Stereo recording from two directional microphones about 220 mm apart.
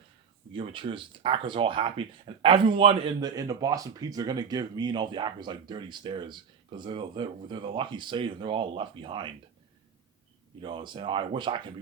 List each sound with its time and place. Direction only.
0.5 s speech: 25° right (ahead or behind)
10.6 s speech: 20° right (ahead or behind)